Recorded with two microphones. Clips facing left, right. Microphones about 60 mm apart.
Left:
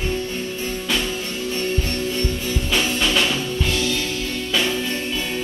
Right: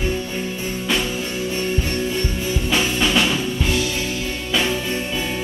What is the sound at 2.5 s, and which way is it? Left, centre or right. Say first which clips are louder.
Music: right 3 dB; centre.